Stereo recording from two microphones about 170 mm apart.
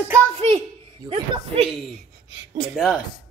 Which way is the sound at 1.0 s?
30° right (ahead or behind).